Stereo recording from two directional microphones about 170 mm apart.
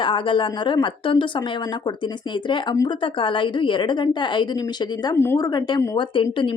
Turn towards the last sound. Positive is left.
turn(degrees=30)  # may be behind; listen again after turning